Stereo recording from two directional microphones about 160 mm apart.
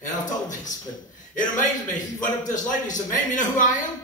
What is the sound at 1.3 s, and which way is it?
A man's voice, 55° left (ahead or behind).